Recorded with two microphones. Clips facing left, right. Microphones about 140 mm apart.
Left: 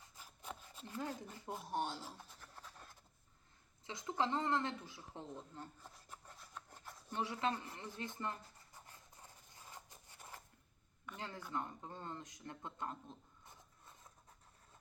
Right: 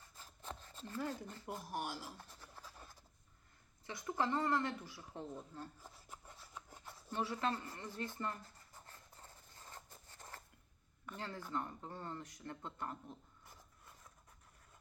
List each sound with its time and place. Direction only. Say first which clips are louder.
0.2 s rub: right 1 dB; 10° left (ahead or behind)
1.6 s speech: left 4 dB; 25° left (ahead or behind)
2.1 s a sound: right 1 dB; centre (ahead or behind)
3.8 s speech: even; 20° left (ahead or behind)
5.2 s speech: right 3 dB; 15° right (ahead or behind)
5.8 s filing: right 1 dB; 5° right (ahead or behind)
7.1 s a sound: even; 15° left (ahead or behind)
11.2 s speech: right 1 dB; 15° left (ahead or behind)